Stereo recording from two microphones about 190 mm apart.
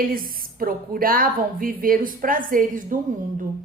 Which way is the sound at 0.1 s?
50° right (ahead or behind).